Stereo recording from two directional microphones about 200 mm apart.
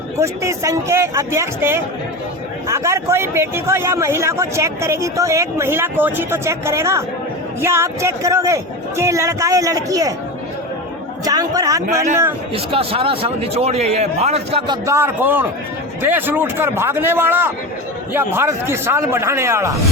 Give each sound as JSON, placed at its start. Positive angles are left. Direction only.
{"t": 0.2, "sound": "a man's voice", "side_deg": -15}
{"t": 11.3, "sound": "a man's voice", "side_deg": -15}
{"t": 12.5, "sound": "speech", "side_deg": -30}
{"t": 14.8, "sound": "a man's voice", "side_deg": -10}